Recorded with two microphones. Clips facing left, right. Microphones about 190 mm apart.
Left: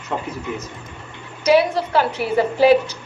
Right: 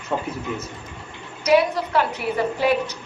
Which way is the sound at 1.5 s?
30° left (ahead or behind).